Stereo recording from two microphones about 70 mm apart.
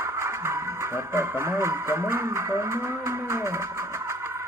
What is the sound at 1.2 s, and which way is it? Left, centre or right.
Music, right.